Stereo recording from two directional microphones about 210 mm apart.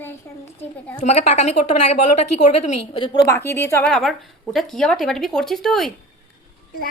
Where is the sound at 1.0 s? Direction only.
30° left (ahead or behind); by 5.9 s centre (ahead or behind).